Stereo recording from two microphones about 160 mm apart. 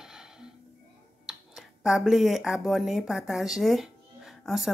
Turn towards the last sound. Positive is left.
turn(degrees=0)  # may be behind; listen again after turning